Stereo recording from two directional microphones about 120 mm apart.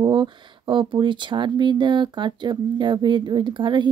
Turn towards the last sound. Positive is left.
turn(degrees=-40)  # may be behind; listen again after turning